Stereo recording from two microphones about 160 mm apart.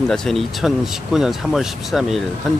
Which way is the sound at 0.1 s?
Centre (ahead or behind).